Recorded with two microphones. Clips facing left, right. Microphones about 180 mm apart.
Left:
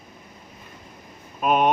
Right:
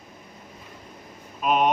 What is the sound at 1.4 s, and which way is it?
Speech, 50° left (ahead or behind).